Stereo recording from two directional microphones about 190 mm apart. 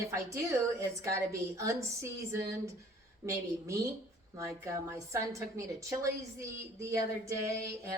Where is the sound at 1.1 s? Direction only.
15° right (ahead or behind).